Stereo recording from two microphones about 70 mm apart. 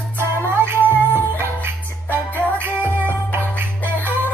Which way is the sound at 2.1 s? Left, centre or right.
Right.